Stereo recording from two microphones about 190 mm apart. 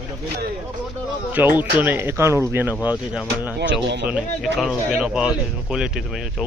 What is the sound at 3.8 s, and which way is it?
Speech, 65° right (ahead or behind).